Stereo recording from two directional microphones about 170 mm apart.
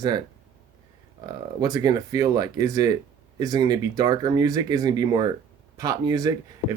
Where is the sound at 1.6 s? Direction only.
20° right (ahead or behind).